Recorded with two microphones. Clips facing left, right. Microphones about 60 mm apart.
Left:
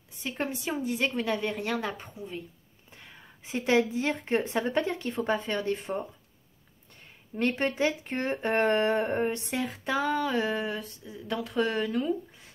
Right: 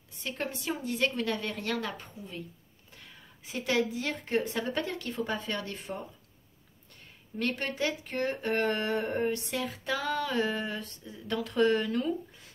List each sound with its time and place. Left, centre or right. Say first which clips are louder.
0.2 s a woman's voice: left 3 dB; centre
7.3 s speech: left 5 dB; left; by 12.1 s centre